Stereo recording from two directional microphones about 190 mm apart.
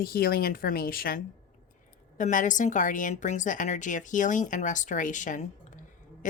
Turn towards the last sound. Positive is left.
turn(degrees=40)  # may be behind; listen again after turning